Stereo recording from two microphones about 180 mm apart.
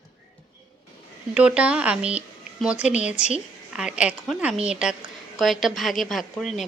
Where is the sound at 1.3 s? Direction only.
5° right (ahead or behind).